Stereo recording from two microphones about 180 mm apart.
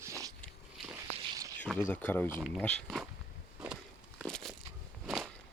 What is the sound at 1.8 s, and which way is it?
Speech, 10° left (ahead or behind).